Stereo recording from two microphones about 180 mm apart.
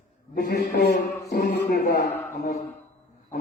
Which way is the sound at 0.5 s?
55° left (ahead or behind).